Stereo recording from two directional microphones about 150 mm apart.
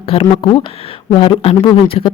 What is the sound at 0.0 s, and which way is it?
A woman's voice, 35° left (ahead or behind).